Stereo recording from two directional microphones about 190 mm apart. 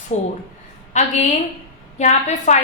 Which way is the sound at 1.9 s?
40° left (ahead or behind).